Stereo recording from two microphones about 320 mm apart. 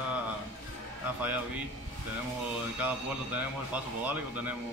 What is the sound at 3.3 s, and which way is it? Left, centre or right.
Speech, centre.